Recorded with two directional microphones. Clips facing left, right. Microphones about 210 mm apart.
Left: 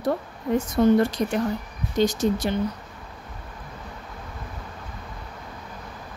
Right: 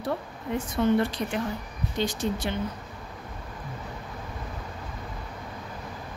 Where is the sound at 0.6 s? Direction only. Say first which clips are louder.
Left 5 dB; 40° left (ahead or behind).